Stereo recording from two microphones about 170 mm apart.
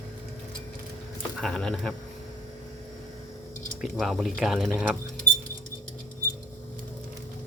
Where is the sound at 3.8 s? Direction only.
Centre (ahead or behind).